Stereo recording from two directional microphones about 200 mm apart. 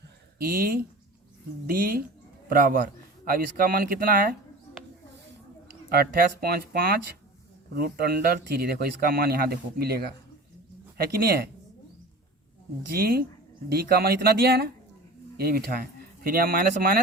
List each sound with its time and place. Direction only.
0.3 s speech: 50° right (ahead or behind)
5.9 s speech: 50° right (ahead or behind)
12.9 s speech: 50° right (ahead or behind)